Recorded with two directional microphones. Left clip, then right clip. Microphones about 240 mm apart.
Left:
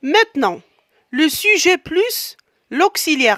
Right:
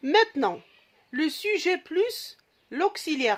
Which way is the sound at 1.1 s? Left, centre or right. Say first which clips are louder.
Left 12 dB; left.